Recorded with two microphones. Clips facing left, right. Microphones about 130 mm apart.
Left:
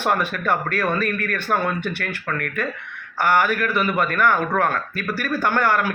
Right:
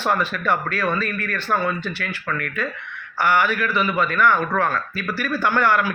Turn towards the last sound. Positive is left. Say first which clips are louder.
# right 1 dB
turn(degrees=50)  # may be behind; listen again after turning